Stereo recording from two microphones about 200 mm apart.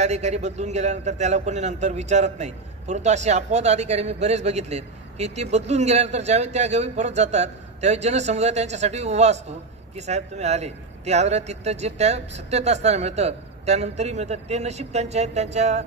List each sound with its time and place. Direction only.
0.0 s a man's voice: 35° right (ahead or behind)